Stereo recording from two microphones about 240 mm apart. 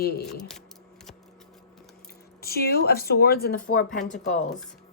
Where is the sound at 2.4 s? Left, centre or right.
Left.